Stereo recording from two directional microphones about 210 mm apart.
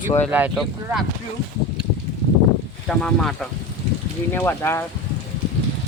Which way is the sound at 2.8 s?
Centre (ahead or behind).